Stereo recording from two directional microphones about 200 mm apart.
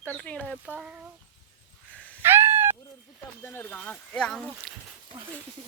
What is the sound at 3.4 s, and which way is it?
Speech, 10° left (ahead or behind).